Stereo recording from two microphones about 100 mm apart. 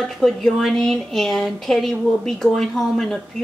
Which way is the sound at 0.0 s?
5° left (ahead or behind).